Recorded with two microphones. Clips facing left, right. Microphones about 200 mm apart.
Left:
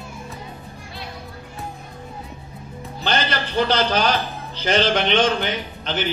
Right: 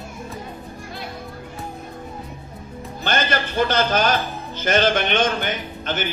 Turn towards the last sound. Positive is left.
turn(degrees=-50)  # may be behind; listen again after turning